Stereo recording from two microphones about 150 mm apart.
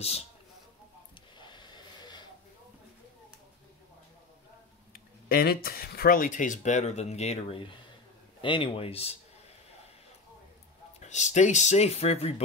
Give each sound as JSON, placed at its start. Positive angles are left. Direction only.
{"t": 1.4, "sound": "hiss", "side_deg": 30}
{"t": 4.9, "sound": "a man's voice", "side_deg": 80}
{"t": 11.0, "sound": "speech", "side_deg": 50}